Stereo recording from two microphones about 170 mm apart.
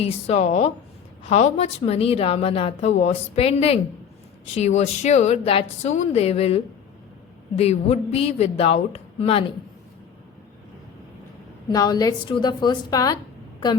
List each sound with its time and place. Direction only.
0.0 s a woman's voice: 35° left (ahead or behind)
11.7 s a woman's voice: 25° left (ahead or behind)